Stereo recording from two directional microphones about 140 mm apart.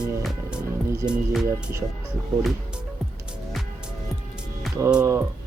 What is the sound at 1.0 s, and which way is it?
Music, 5° right (ahead or behind).